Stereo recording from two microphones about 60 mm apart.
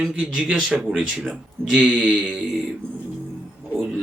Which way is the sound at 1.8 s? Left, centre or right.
Centre.